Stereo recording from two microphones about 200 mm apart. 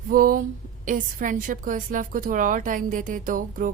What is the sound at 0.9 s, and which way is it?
A woman's voice, 40° right (ahead or behind).